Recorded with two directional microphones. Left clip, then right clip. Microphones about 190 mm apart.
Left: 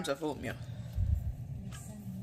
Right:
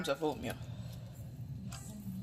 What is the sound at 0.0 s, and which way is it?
Speech, 20° left (ahead or behind).